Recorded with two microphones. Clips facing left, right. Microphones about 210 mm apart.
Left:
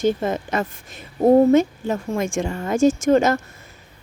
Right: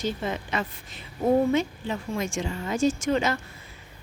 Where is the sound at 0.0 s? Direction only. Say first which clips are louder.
Left 9 dB; 50° left (ahead or behind).